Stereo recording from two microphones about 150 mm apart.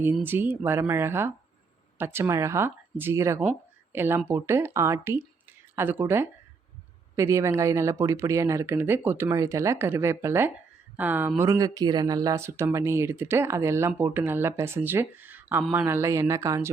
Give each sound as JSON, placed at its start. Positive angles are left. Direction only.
{"t": 0.0, "sound": "speech", "side_deg": -15}